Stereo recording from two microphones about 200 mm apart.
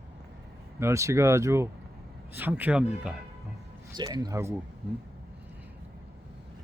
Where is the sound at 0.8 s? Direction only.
15° right (ahead or behind).